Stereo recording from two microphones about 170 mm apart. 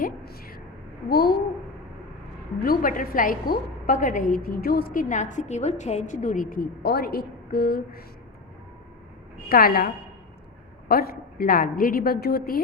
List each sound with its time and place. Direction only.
0.0 s a sound: 60° left (ahead or behind)
1.0 s a woman's voice: 65° left (ahead or behind)
2.6 s a woman's voice: 55° left (ahead or behind)
9.5 s a woman's voice: 60° left (ahead or behind)